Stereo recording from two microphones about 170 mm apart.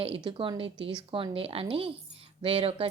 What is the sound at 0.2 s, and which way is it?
A woman's voice, 30° right (ahead or behind).